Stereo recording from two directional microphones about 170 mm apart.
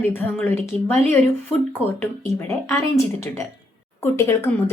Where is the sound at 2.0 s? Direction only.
15° left (ahead or behind).